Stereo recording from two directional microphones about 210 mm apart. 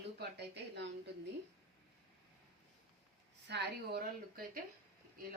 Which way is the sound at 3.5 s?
50° right (ahead or behind).